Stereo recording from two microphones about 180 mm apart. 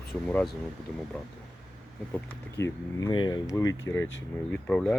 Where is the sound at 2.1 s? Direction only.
10° left (ahead or behind).